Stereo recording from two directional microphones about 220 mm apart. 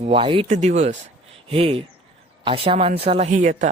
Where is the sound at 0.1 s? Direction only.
25° right (ahead or behind).